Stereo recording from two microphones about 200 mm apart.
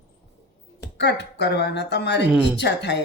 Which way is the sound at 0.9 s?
60° left (ahead or behind).